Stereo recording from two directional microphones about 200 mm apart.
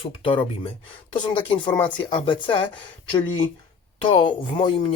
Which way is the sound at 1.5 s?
5° left (ahead or behind).